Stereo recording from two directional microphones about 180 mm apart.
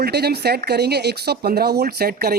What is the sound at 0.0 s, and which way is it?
Speech, 65° right (ahead or behind).